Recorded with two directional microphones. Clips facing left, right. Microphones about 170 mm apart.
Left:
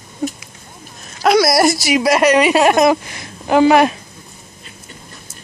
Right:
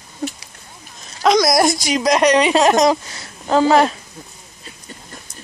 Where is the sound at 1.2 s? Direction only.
5° left (ahead or behind).